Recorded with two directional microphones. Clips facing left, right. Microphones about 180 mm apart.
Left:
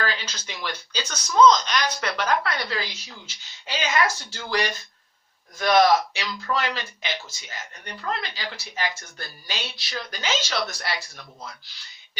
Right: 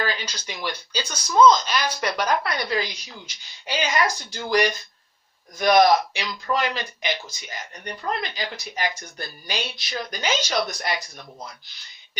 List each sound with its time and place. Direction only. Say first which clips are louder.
0.0 s speech: right 1 dB; 15° right (ahead or behind)